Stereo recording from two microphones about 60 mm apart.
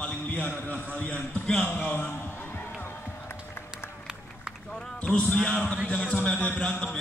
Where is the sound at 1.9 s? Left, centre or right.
Left.